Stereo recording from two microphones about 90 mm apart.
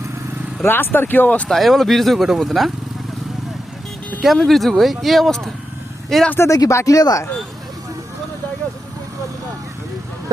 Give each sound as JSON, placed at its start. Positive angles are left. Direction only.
{"t": 0.6, "sound": "speech", "side_deg": 25}
{"t": 1.5, "sound": "speech", "side_deg": 0}
{"t": 4.2, "sound": "speech", "side_deg": 0}
{"t": 6.5, "sound": "speech", "side_deg": 35}